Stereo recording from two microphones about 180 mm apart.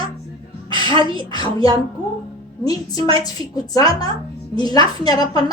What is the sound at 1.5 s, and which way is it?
Speech, 30° right (ahead or behind).